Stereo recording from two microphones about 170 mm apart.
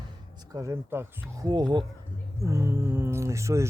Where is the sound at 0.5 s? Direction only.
15° right (ahead or behind).